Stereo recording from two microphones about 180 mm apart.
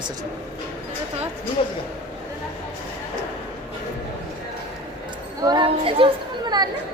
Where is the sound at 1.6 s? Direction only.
30° left (ahead or behind).